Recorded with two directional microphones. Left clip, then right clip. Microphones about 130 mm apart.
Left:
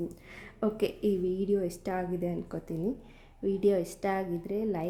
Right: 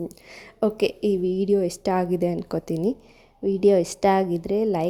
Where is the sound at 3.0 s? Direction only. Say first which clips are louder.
Right 7 dB; 35° right (ahead or behind).